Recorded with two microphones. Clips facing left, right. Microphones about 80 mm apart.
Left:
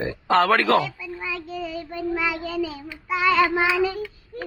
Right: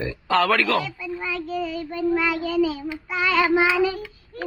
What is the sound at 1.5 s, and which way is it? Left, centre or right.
Child singing, centre.